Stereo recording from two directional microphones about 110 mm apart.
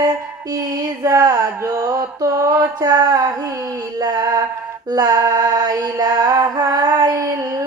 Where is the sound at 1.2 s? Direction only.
35° right (ahead or behind).